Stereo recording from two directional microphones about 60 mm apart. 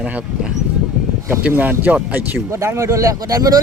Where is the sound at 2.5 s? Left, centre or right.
Right.